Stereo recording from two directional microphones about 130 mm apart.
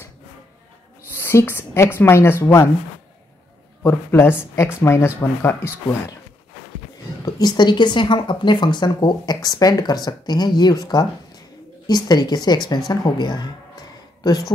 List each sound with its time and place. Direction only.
1.1 s speech: 20° left (ahead or behind)
3.8 s speech: 20° left (ahead or behind)
7.2 s speech: 35° left (ahead or behind)